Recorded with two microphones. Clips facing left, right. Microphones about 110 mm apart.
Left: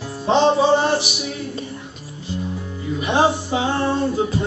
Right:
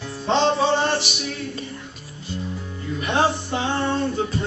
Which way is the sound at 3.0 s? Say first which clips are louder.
Left 3 dB; 5° left (ahead or behind).